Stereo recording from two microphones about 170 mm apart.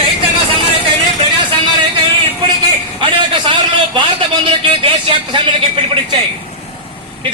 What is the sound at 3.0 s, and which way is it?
A man's voice, 30° right (ahead or behind).